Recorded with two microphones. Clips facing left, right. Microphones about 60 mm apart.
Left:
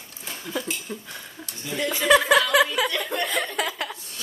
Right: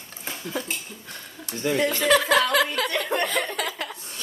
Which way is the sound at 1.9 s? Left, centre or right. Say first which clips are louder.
Left 4 dB; centre.